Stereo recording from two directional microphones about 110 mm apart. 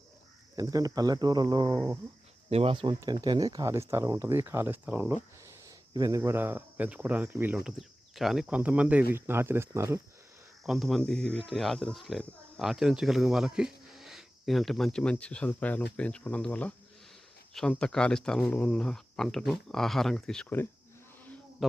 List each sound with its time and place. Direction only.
0.5 s speech: 35° right (ahead or behind)
1.7 s speech: 25° right (ahead or behind)
2.5 s speech: 65° right (ahead or behind)
3.0 s speech: 35° right (ahead or behind); by 7.6 s 15° right (ahead or behind)
7.6 s speech: centre (ahead or behind); by 10.0 s 25° right (ahead or behind)
10.7 s speech: centre (ahead or behind)
21.6 s speech: centre (ahead or behind)